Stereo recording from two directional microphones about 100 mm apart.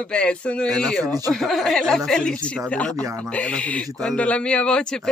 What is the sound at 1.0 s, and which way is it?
Speech, 35° right (ahead or behind).